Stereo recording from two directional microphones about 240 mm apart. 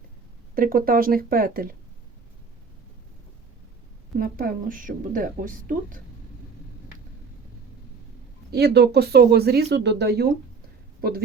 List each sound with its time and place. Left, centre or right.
0.5 s speech: right
4.2 s speech: right
8.5 s speech: right